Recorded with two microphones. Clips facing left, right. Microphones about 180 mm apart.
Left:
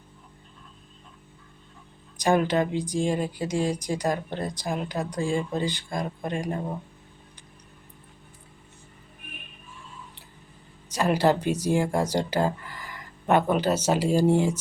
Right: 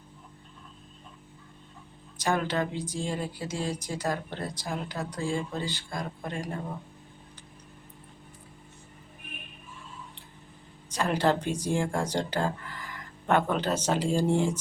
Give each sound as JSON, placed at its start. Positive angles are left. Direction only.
{"t": 2.1, "sound": "a woman's voice", "side_deg": 15}
{"t": 10.9, "sound": "a woman's voice", "side_deg": 10}